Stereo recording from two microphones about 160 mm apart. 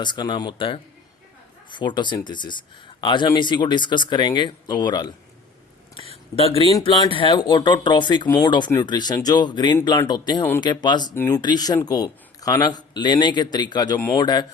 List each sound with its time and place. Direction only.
0.0 s speech: 30° left (ahead or behind)
6.0 s a sound: 30° left (ahead or behind)
6.3 s speech: 35° left (ahead or behind)
11.1 s speech: 15° left (ahead or behind)
11.3 s speech: 25° left (ahead or behind)